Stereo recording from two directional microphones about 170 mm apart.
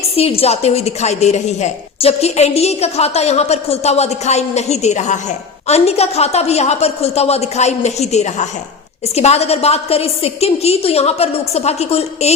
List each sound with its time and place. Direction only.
0.2 s a woman's voice: 35° left (ahead or behind)